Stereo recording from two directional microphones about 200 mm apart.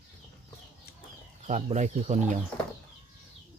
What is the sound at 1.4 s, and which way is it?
Speech, 35° right (ahead or behind).